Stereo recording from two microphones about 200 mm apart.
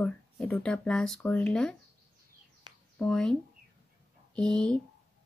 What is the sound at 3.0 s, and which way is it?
Speech, 5° left (ahead or behind).